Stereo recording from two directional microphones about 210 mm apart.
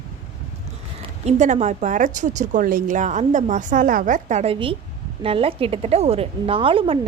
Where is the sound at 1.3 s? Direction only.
35° right (ahead or behind).